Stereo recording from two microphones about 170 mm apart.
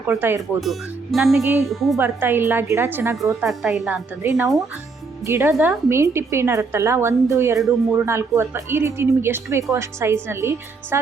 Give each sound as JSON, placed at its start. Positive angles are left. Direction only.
{"t": 0.1, "sound": "a woman's voice", "side_deg": -15}
{"t": 0.6, "sound": "speech", "side_deg": 0}
{"t": 2.0, "sound": "a woman's voice", "side_deg": -10}
{"t": 3.4, "sound": "speech", "side_deg": 0}
{"t": 3.9, "sound": "a woman's voice", "side_deg": -15}